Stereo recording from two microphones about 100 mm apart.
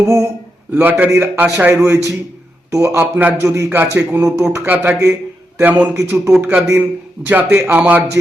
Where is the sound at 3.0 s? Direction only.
15° right (ahead or behind).